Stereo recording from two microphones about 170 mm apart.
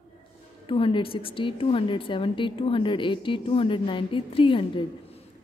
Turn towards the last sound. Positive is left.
turn(degrees=30)  # may be behind; listen again after turning